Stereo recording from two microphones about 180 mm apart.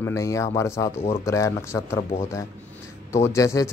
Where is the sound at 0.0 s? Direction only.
15° left (ahead or behind).